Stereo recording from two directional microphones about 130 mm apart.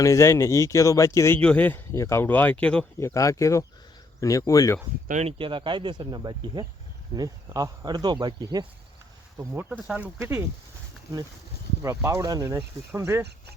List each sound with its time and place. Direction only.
0.0 s speech: 25° left (ahead or behind)
1.4 s speech: 10° left (ahead or behind)
3.0 s speech: 25° left (ahead or behind)
5.2 s speech: 40° right (ahead or behind)
9.4 s speech: 20° right (ahead or behind)
11.8 s speech: 25° right (ahead or behind)